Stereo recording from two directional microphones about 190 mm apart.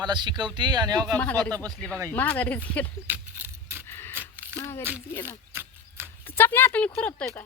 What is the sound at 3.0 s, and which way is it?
Keys jangling, 10° right (ahead or behind).